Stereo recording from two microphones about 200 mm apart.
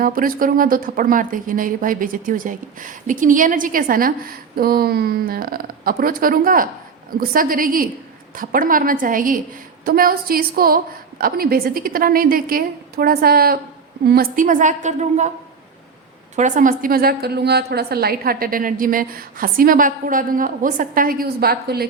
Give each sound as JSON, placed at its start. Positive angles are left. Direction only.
{"t": 0.0, "sound": "a woman's voice", "side_deg": -45}
{"t": 16.3, "sound": "speech", "side_deg": -40}